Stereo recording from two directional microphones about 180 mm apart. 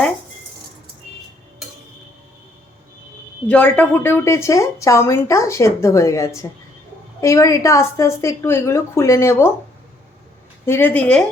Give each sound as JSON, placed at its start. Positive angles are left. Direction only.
{"t": 3.4, "sound": "speech", "side_deg": 5}
{"t": 10.7, "sound": "speech", "side_deg": 10}